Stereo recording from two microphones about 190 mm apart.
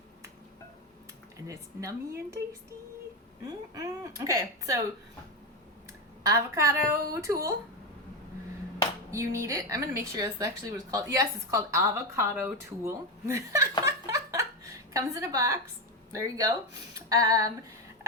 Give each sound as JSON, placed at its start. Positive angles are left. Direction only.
{"t": 1.5, "sound": "speech", "side_deg": -15}
{"t": 3.4, "sound": "speech", "side_deg": -20}
{"t": 6.2, "sound": "speech", "side_deg": -15}
{"t": 9.0, "sound": "a woman's voice", "side_deg": -15}